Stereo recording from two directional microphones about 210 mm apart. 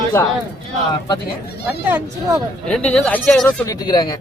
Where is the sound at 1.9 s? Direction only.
10° right (ahead or behind).